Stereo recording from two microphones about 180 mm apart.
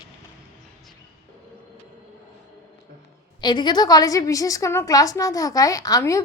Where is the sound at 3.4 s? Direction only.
25° left (ahead or behind).